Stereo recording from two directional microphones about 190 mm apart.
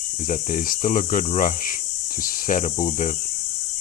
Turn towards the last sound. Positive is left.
turn(degrees=40)  # may be behind; listen again after turning